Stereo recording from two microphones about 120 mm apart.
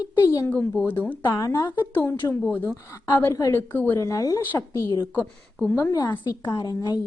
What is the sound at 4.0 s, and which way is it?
Speech, 30° left (ahead or behind).